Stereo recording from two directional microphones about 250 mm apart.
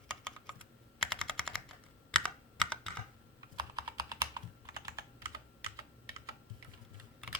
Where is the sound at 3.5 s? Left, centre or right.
Centre.